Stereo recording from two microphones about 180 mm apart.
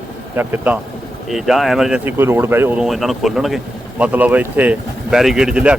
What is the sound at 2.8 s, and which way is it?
Speech, centre (ahead or behind).